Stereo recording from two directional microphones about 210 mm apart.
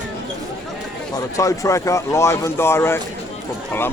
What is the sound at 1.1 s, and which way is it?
Speech, 15° left (ahead or behind).